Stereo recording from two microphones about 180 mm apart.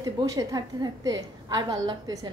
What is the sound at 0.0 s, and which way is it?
A woman's voice, 20° right (ahead or behind).